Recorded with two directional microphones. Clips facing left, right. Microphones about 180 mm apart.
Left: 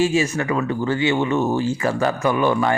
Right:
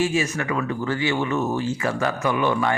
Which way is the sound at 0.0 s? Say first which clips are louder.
Left 4 dB; 30° left (ahead or behind).